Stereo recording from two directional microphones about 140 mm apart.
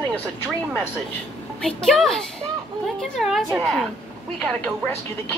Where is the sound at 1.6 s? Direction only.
Centre (ahead or behind).